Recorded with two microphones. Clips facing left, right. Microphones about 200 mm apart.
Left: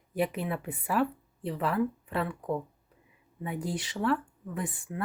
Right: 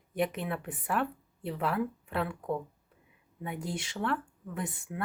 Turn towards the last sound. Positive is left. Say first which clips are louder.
# left 2 dB
turn(degrees=0)  # may be behind; listen again after turning